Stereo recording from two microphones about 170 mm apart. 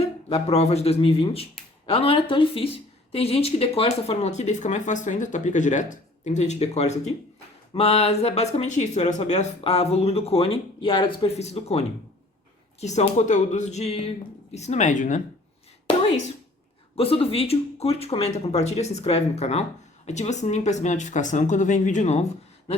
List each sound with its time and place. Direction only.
0.0 s speech: 35° left (ahead or behind)
16.9 s speech: 35° left (ahead or behind)